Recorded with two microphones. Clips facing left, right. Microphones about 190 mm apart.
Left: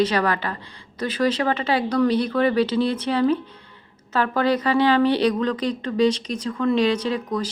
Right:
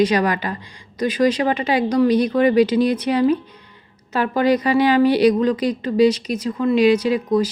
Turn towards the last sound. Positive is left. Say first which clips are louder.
# right 7 dB
turn(degrees=-10)  # may be behind; listen again after turning